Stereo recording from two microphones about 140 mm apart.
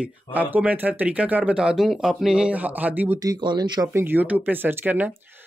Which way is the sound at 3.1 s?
30° right (ahead or behind).